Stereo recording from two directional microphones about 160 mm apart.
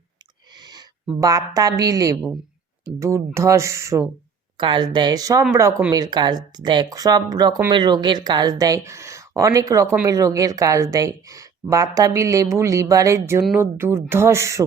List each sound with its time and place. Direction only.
0.6 s a sound: 25° right (ahead or behind)
1.2 s speech: 20° right (ahead or behind)
4.5 s speech: 30° right (ahead or behind)